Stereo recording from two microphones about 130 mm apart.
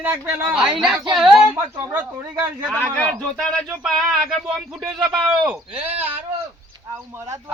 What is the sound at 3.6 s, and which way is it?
Speech, 5° right (ahead or behind).